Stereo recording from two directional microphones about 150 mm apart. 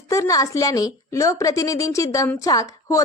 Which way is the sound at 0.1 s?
20° left (ahead or behind).